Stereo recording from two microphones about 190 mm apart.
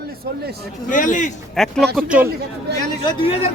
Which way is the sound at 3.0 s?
25° left (ahead or behind).